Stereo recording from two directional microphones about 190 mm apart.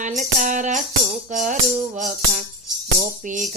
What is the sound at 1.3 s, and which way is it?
Music, 45° right (ahead or behind).